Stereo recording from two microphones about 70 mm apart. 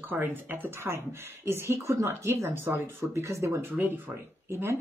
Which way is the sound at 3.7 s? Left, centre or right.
Right.